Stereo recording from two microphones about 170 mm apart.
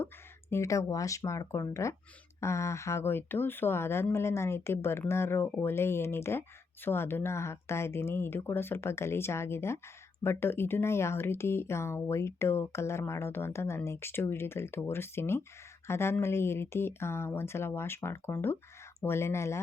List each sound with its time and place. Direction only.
0.5 s speech: 15° left (ahead or behind)